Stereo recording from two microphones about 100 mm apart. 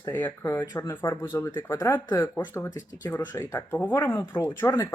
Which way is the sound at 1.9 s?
40° left (ahead or behind).